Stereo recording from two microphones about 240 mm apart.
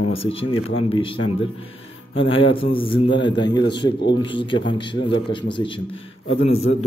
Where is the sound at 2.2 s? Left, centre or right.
Left.